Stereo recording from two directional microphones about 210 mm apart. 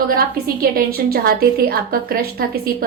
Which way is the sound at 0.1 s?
45° right (ahead or behind).